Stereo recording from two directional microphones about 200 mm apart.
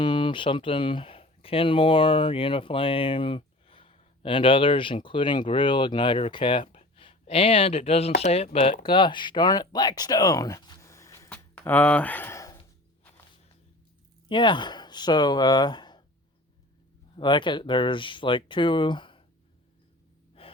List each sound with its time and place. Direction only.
0.0 s speech: 25° left (ahead or behind)
14.3 s speech: 25° left (ahead or behind)
17.2 s speech: 25° left (ahead or behind)
20.4 s gasp: 30° left (ahead or behind)